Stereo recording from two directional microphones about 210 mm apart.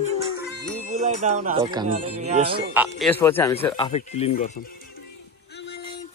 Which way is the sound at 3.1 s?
10° left (ahead or behind).